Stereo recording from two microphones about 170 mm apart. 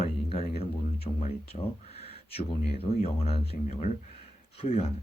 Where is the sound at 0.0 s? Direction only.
35° left (ahead or behind).